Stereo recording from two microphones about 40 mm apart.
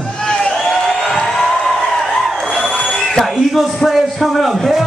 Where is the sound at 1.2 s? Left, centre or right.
Centre.